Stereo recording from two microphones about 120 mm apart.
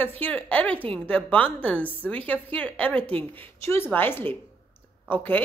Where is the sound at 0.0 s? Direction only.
15° left (ahead or behind).